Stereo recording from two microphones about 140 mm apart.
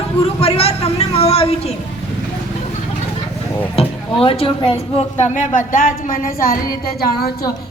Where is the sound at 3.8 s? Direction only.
45° left (ahead or behind).